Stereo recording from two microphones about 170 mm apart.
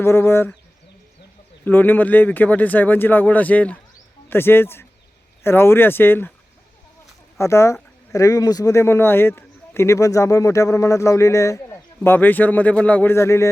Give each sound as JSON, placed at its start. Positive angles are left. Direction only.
{"t": 0.0, "sound": "speech", "side_deg": 15}
{"t": 1.6, "sound": "speech", "side_deg": 10}
{"t": 7.3, "sound": "speech", "side_deg": 15}